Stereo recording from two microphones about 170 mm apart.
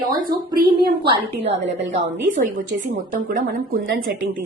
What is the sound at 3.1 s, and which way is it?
Speech, 60° right (ahead or behind).